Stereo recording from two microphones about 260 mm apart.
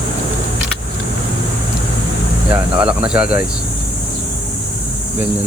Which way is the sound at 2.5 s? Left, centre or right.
Centre.